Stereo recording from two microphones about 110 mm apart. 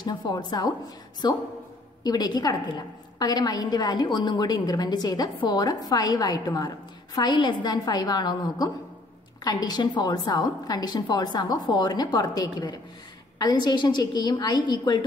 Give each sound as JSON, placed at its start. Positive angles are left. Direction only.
{"t": 0.0, "sound": "a woman's voice", "side_deg": 40}